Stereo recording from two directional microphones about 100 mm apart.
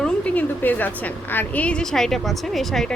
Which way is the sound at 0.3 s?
15° left (ahead or behind).